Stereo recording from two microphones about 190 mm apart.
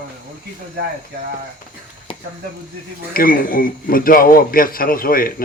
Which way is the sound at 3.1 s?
50° left (ahead or behind).